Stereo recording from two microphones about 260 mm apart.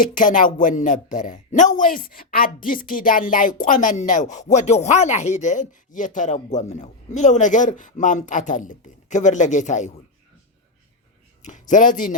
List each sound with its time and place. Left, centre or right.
0.0 s speech: left
11.4 s speech: left